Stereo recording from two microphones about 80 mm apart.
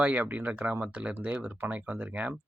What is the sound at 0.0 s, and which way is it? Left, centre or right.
Speech, centre.